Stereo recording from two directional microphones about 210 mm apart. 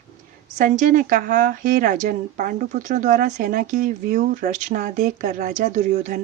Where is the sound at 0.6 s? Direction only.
40° right (ahead or behind).